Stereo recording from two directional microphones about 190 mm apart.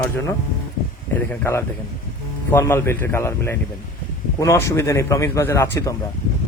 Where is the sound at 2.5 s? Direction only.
15° left (ahead or behind).